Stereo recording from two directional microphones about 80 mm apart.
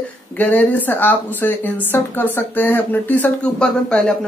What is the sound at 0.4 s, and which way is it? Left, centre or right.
Speech, centre.